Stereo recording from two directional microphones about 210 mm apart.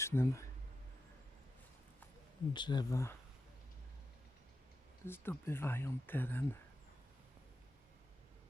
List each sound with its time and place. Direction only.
0.0 s speech: 10° left (ahead or behind)
2.5 s speech: 20° left (ahead or behind)
5.0 s speech: 10° left (ahead or behind)